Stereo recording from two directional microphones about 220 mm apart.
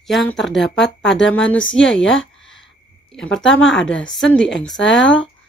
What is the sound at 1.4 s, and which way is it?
Speech, 60° left (ahead or behind).